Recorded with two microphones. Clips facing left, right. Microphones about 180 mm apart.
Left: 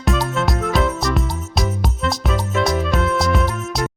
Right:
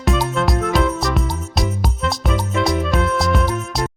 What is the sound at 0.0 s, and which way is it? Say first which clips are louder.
Music: right 1 dB; centre (ahead or behind).